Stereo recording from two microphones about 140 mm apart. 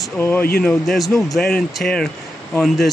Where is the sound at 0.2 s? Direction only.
15° left (ahead or behind).